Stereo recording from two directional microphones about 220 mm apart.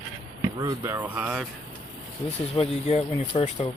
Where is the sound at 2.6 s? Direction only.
30° left (ahead or behind).